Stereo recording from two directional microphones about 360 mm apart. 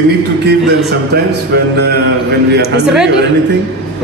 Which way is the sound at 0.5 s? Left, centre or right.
Right.